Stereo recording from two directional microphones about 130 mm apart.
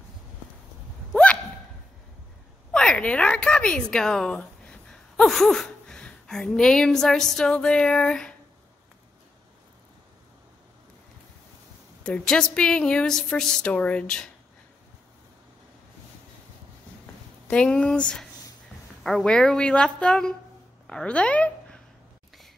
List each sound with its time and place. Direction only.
1.1 s hiccup: 5° left (ahead or behind)
2.7 s a woman's voice: 5° left (ahead or behind)
12.0 s speech: 5° left (ahead or behind)
17.5 s a woman's voice: 5° left (ahead or behind)